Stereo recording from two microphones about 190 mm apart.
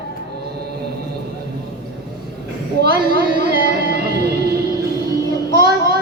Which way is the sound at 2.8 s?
55° right (ahead or behind).